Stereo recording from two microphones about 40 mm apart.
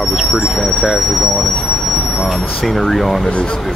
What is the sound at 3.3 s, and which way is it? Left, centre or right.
Speech, left.